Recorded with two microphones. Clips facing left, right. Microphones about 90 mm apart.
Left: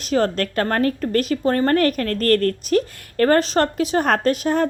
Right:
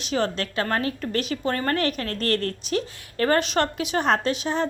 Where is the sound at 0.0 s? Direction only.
45° left (ahead or behind).